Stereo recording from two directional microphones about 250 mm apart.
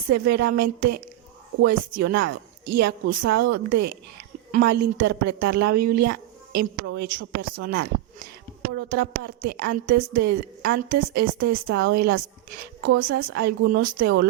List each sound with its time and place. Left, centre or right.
0.1 s a woman's voice: right
3.7 s a woman's voice: right
4.5 s a woman's voice: right
5.9 s music: right
7.2 s a woman's voice: right